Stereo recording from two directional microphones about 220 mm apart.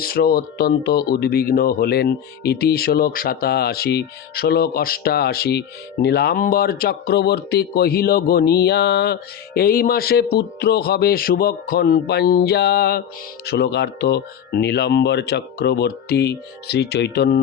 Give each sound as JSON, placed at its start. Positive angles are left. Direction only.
{"t": 0.0, "sound": "speech", "side_deg": 45}